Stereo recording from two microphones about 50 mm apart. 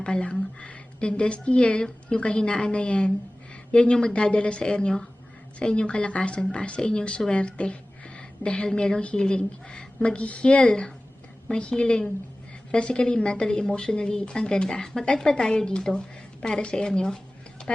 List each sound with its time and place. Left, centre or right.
0.0 s a woman's voice: left